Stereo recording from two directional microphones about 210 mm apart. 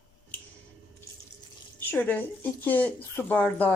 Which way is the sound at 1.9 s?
10° left (ahead or behind).